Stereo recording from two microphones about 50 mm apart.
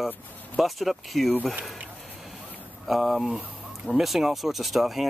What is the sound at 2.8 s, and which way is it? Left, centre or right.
Speech, centre.